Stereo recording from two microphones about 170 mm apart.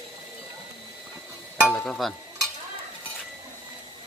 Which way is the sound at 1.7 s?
Centre (ahead or behind).